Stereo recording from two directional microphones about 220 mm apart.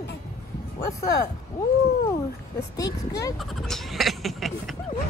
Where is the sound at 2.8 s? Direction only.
15° left (ahead or behind).